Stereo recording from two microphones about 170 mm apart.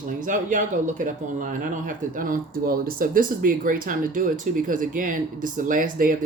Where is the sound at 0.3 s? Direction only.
50° right (ahead or behind).